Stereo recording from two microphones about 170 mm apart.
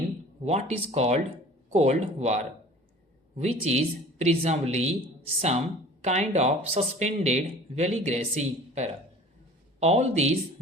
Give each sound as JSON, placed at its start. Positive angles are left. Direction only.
{"t": 0.4, "sound": "speech", "side_deg": -40}